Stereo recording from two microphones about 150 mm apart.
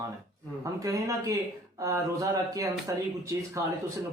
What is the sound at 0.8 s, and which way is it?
Speech, 25° right (ahead or behind).